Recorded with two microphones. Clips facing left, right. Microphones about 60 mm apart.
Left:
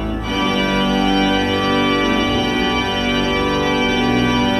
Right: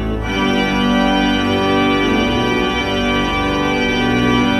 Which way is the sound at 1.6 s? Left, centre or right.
Centre.